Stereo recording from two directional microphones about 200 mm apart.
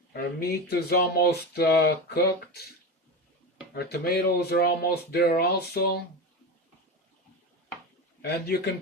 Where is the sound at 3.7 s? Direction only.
50° left (ahead or behind).